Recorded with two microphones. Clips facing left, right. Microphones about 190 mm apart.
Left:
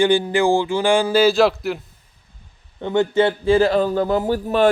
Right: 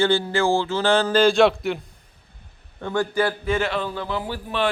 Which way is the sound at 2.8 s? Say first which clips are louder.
Left 5 dB; 20° left (ahead or behind).